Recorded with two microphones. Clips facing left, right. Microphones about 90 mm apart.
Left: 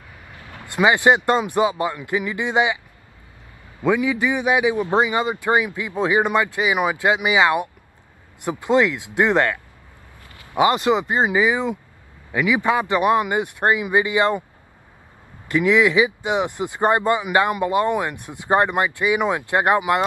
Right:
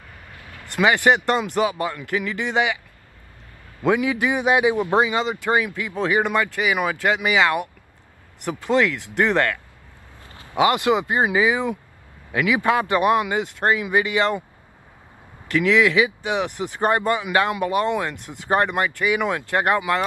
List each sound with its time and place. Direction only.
0.7 s speech: 15° left (ahead or behind)
3.8 s a man's voice: 15° right (ahead or behind)
4.8 s speech: 20° left (ahead or behind)
10.6 s speech: 20° left (ahead or behind)
15.5 s speech: 15° left (ahead or behind)